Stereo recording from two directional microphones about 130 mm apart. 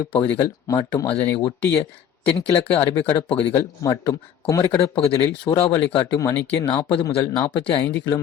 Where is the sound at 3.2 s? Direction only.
45° left (ahead or behind).